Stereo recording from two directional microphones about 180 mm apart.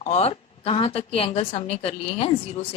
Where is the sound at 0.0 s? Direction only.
35° left (ahead or behind).